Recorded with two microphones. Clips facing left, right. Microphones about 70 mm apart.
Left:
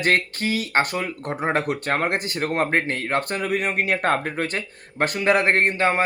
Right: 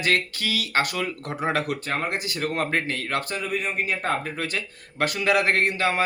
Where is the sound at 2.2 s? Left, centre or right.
Left.